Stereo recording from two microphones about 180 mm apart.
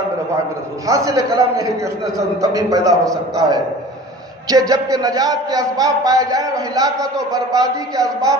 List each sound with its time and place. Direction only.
0.8 s a man's voice: 15° right (ahead or behind)